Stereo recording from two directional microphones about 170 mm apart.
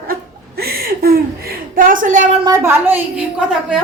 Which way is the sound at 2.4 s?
15° right (ahead or behind).